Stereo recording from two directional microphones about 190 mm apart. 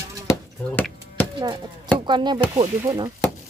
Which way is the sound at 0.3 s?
10° left (ahead or behind).